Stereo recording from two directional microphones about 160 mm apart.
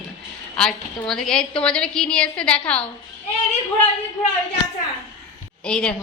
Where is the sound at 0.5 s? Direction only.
5° left (ahead or behind).